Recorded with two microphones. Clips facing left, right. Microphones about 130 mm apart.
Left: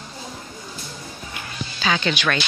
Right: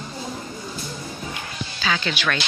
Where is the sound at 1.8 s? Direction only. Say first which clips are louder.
Left 3 dB; 5° left (ahead or behind).